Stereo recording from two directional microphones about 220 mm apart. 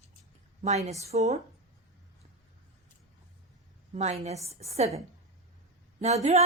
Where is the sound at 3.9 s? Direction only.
30° right (ahead or behind).